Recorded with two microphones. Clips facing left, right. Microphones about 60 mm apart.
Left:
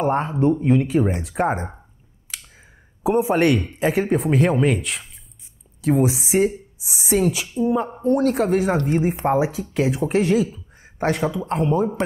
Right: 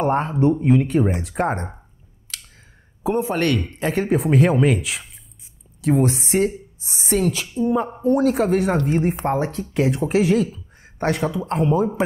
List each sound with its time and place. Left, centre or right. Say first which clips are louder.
0.0 s speech: right 1 dB; centre
2.3 s a sound: even; centre
3.0 s a man's voice: left 3 dB; centre
3.8 s speech: even; centre